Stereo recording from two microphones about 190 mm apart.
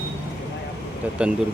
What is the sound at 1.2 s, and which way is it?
Speech, 5° right (ahead or behind).